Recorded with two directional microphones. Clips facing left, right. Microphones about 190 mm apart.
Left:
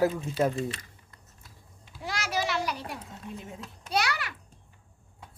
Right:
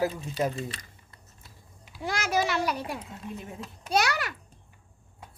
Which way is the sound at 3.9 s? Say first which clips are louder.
Right 3 dB; 45° right (ahead or behind).